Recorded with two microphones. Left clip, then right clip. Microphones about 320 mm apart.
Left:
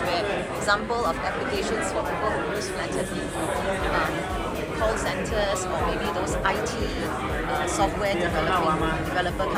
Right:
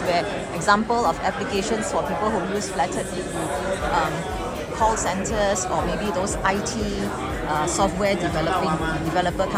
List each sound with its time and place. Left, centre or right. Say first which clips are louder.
0.7 s speech: right 5 dB; right
7.8 s speech: right 2 dB; centre